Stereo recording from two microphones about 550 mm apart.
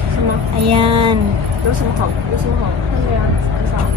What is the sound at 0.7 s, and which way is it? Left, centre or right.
Speech, right.